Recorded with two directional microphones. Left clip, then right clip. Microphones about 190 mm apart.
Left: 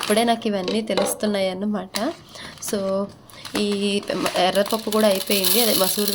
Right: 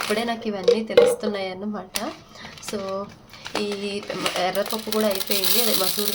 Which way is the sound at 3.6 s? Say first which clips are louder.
Left 7 dB; 40° left (ahead or behind).